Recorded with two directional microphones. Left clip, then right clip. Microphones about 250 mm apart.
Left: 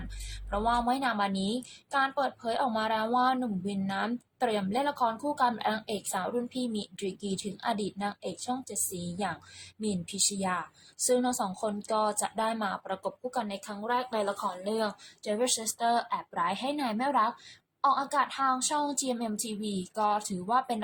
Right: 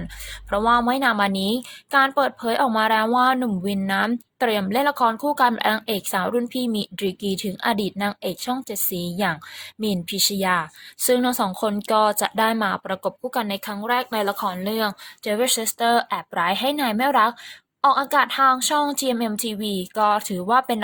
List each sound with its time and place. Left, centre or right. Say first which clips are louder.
0.5 s speech: right 9 dB; right